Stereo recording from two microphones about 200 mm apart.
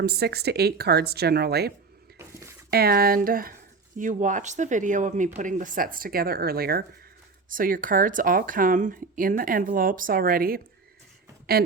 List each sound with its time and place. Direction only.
0.0 s speech: 50° right (ahead or behind)
2.1 s a sound: 15° right (ahead or behind)
2.6 s speech: 50° right (ahead or behind)